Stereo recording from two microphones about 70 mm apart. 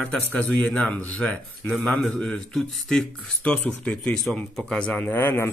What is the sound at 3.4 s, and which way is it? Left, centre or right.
Speech, centre.